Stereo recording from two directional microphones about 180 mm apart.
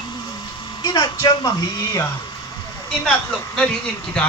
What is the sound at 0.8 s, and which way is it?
A woman's voice, 25° left (ahead or behind).